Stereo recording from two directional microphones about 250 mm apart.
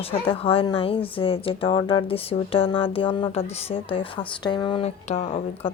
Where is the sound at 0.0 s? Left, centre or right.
Left.